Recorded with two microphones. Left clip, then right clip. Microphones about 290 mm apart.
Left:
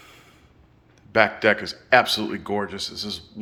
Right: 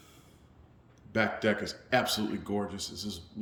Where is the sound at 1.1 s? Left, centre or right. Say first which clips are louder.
Left 10 dB; centre.